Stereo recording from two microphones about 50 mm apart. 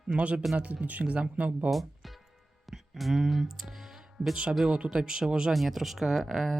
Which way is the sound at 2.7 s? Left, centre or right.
Centre.